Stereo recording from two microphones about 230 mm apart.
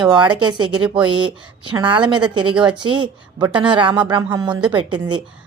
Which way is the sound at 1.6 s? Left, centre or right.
Right.